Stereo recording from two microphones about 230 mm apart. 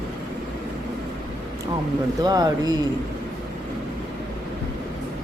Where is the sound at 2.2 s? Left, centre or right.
Centre.